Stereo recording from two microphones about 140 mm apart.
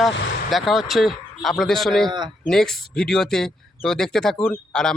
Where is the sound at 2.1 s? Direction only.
30° right (ahead or behind).